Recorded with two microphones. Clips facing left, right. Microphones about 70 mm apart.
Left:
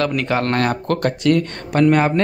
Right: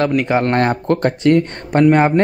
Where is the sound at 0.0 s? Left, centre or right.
Centre.